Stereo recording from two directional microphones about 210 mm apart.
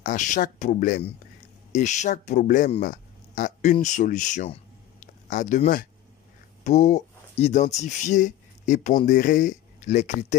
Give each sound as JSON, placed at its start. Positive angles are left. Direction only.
{"t": 0.0, "sound": "speech", "side_deg": 35}